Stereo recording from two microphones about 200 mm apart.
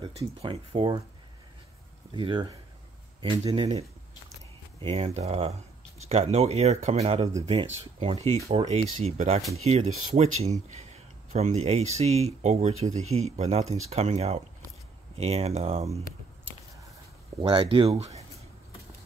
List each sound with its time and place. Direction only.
0.0 s speech: 25° right (ahead or behind)
2.1 s speech: 20° right (ahead or behind)
17.4 s speech: 25° right (ahead or behind)